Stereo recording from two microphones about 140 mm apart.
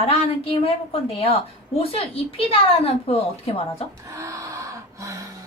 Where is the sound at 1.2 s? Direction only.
45° left (ahead or behind).